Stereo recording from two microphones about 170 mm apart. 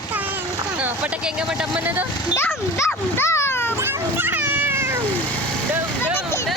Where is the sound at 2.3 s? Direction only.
15° left (ahead or behind).